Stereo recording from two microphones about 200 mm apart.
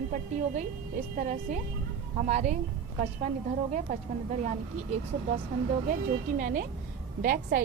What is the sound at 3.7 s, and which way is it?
Speech, 35° right (ahead or behind).